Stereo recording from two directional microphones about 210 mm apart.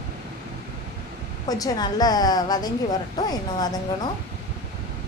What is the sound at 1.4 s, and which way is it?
A woman's voice, 15° left (ahead or behind).